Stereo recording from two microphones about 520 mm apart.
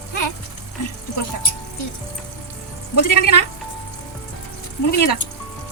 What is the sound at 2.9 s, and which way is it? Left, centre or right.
Speech, left.